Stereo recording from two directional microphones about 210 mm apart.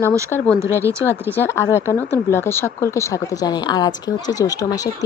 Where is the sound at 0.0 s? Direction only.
10° left (ahead or behind).